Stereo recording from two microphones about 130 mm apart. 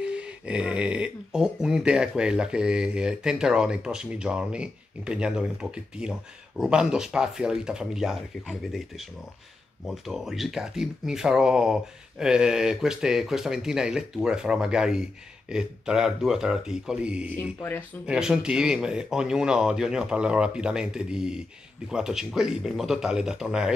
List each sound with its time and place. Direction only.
0.0 s speech: 5° right (ahead or behind)
17.4 s speech: 15° left (ahead or behind)
18.0 s speech: 5° right (ahead or behind)